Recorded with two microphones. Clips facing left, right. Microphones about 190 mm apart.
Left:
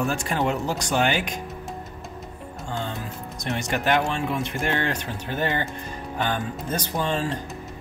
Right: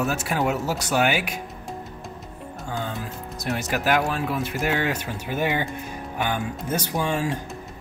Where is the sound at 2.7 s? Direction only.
Centre (ahead or behind).